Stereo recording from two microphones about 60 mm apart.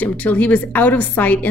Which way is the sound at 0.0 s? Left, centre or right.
Left.